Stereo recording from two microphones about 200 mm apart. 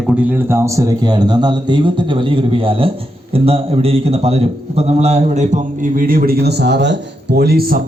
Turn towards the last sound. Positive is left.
turn(degrees=-50)  # may be behind; listen again after turning